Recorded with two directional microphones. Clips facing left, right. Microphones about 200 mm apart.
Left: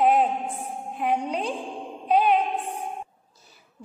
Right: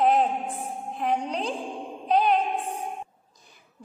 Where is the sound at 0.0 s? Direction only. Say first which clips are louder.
Left 1 dB; 5° left (ahead or behind).